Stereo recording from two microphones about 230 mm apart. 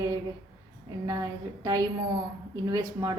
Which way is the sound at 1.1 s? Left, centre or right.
Centre.